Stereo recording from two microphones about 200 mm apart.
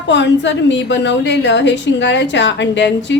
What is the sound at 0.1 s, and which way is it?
A woman's voice, 65° left (ahead or behind).